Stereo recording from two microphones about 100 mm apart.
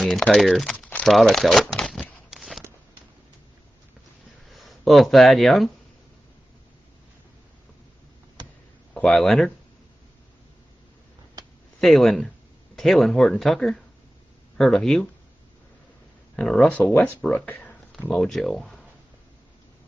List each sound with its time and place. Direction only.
0.4 s speech: centre (ahead or behind)
0.7 s crumpling: 15° left (ahead or behind)
1.0 s speech: 5° left (ahead or behind)
2.3 s a sound: centre (ahead or behind)
4.5 s speech: centre (ahead or behind)
8.9 s speech: 5° left (ahead or behind)
11.8 s speech: 5° left (ahead or behind)
16.3 s speech: 5° left (ahead or behind)
18.1 s speech: 5° left (ahead or behind)